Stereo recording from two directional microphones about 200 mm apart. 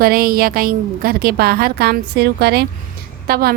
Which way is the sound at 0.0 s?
50° right (ahead or behind).